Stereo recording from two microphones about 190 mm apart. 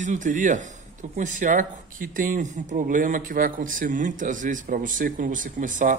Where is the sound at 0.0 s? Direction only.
40° right (ahead or behind).